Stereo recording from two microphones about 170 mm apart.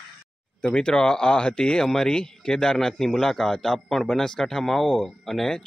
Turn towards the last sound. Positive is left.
turn(degrees=0)  # may be behind; listen again after turning